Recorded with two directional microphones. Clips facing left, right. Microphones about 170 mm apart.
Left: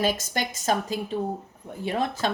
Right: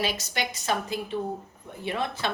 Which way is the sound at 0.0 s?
45° left (ahead or behind).